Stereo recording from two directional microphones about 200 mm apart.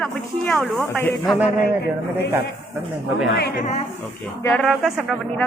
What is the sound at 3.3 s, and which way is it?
Speech, 55° left (ahead or behind).